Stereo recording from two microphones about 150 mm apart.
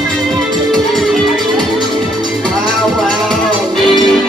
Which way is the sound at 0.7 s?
Centre (ahead or behind).